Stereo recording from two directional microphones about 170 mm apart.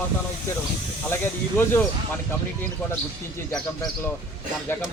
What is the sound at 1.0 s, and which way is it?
Speech, 15° left (ahead or behind).